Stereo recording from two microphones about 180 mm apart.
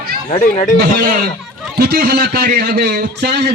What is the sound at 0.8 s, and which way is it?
A man's voice, 60° right (ahead or behind).